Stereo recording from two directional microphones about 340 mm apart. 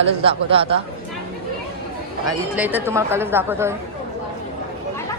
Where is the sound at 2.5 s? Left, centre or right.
Centre.